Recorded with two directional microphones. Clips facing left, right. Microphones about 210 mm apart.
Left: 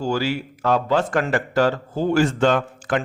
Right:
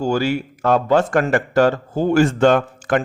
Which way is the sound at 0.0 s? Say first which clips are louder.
Right 4 dB; 50° right (ahead or behind).